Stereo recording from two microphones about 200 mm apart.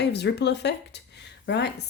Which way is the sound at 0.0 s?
60° left (ahead or behind).